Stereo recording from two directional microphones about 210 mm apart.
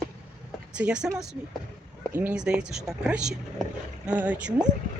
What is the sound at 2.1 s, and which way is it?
Speech, 10° right (ahead or behind).